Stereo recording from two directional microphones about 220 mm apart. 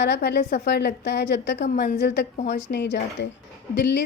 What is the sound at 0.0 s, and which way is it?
A woman's voice, 50° left (ahead or behind).